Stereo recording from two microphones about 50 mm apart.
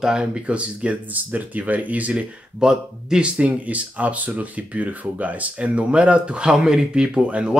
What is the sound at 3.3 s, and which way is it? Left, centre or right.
Speech, right.